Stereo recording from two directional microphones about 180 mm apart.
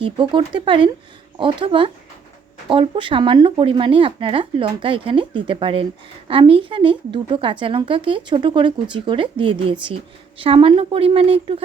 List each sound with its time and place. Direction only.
0.0 s a woman's voice: 30° right (ahead or behind)